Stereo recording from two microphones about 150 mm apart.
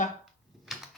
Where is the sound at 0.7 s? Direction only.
Centre (ahead or behind).